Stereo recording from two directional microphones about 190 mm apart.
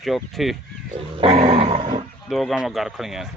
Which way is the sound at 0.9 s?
30° right (ahead or behind).